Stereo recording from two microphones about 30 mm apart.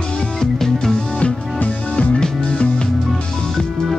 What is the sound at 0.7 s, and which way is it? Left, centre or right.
Music, left.